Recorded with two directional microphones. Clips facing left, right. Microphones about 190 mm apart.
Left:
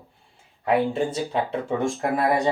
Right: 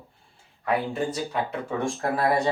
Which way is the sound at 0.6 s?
25° left (ahead or behind).